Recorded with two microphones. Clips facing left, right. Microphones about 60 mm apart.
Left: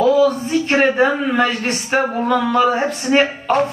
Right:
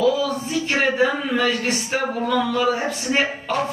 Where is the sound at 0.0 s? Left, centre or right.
Left.